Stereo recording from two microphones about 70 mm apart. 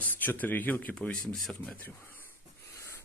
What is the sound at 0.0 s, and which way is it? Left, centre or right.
Speech, left.